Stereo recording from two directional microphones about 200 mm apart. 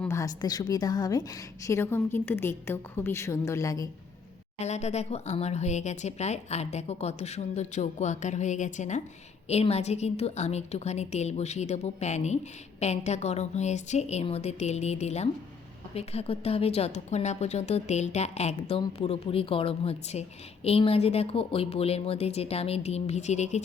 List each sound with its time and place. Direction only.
0.0 s a woman's voice: 15° left (ahead or behind)
4.6 s a woman's voice: 35° left (ahead or behind)